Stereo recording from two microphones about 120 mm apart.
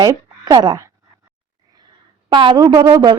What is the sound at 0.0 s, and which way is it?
Speech, 35° right (ahead or behind).